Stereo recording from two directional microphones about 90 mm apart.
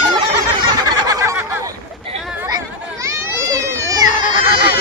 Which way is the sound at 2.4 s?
40° right (ahead or behind).